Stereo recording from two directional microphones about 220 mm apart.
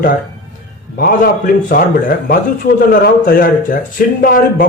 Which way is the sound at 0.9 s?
40° left (ahead or behind).